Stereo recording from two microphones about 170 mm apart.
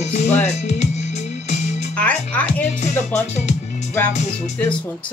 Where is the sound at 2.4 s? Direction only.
45° left (ahead or behind).